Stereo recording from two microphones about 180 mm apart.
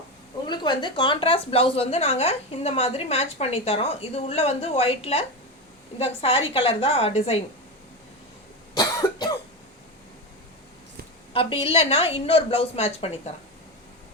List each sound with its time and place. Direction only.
0.4 s a woman's voice: 25° left (ahead or behind)
8.7 s cough: 20° left (ahead or behind)
11.3 s a woman's voice: 30° left (ahead or behind)